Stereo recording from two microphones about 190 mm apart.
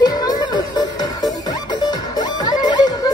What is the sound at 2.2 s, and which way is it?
Music, 20° left (ahead or behind).